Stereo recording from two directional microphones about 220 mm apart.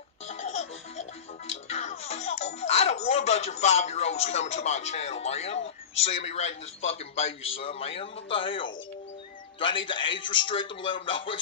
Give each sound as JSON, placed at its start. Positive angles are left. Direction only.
{"t": 0.3, "sound": "music", "side_deg": 30}
{"t": 1.7, "sound": "a man's voice", "side_deg": 30}